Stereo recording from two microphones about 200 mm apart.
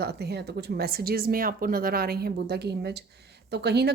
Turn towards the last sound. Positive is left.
turn(degrees=-55)  # may be behind; listen again after turning